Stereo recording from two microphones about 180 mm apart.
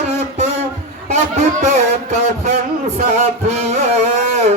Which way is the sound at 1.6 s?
40° right (ahead or behind).